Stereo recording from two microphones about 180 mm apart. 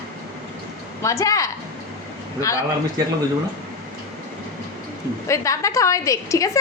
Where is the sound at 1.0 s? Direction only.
15° left (ahead or behind).